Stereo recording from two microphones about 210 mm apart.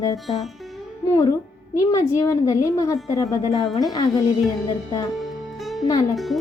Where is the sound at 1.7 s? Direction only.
15° left (ahead or behind).